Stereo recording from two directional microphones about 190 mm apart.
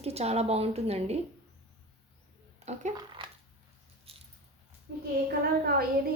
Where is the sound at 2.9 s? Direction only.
25° right (ahead or behind).